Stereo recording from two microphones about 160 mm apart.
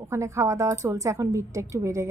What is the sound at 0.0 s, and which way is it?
A woman's voice, 15° right (ahead or behind).